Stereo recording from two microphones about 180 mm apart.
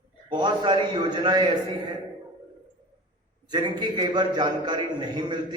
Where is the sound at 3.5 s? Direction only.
25° right (ahead or behind).